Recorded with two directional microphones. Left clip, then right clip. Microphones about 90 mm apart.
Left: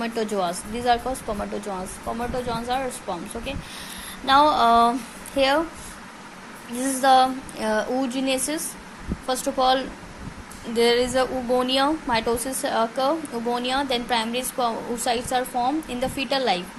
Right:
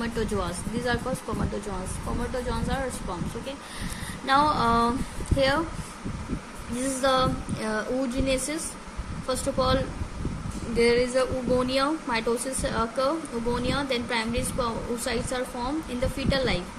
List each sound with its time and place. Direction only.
0.0 s a woman's voice: 25° left (ahead or behind)
2.3 s a woman's voice: 20° left (ahead or behind)
6.7 s a woman's voice: 30° left (ahead or behind)